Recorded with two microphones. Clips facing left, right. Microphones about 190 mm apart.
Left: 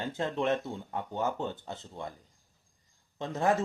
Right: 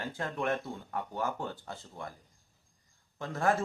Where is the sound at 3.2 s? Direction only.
20° left (ahead or behind).